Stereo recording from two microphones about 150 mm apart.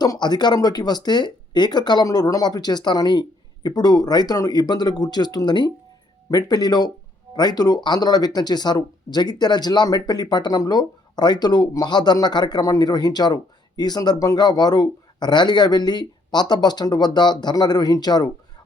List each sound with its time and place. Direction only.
0.0 s speech: 25° left (ahead or behind)